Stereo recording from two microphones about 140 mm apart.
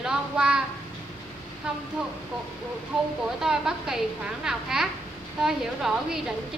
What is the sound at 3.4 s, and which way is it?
A woman's voice, 5° right (ahead or behind).